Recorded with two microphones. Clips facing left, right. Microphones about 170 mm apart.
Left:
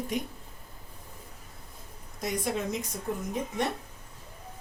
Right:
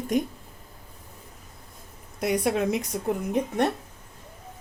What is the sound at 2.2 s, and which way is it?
Speech, 65° right (ahead or behind).